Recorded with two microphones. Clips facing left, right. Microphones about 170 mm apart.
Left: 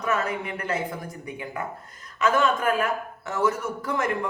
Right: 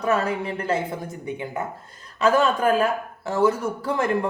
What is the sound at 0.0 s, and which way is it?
Speech, 30° right (ahead or behind).